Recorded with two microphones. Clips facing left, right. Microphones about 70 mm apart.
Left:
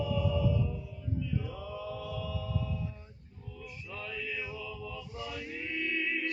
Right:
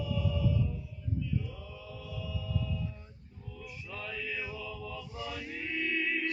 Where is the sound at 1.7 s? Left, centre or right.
Left.